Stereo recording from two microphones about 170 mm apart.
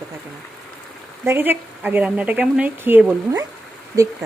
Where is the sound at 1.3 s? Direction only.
10° right (ahead or behind).